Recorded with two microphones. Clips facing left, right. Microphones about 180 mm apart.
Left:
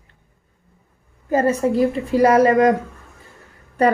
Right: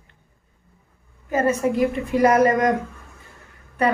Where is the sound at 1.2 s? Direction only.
35° left (ahead or behind).